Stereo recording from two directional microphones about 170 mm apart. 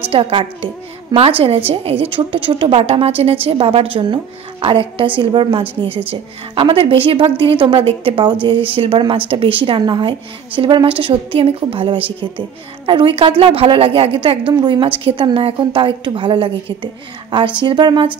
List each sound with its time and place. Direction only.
0.1 s a woman's voice: 30° right (ahead or behind)
1.7 s a woman's voice: 35° right (ahead or behind)